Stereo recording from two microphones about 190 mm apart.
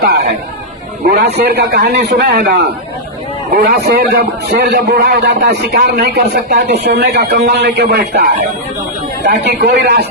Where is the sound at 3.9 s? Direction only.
55° right (ahead or behind).